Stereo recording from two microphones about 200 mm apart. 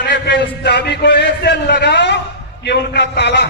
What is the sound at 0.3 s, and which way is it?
A man's voice, 60° left (ahead or behind).